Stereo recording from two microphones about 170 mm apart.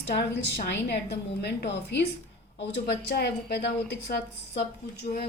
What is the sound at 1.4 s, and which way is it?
A woman's voice, 80° left.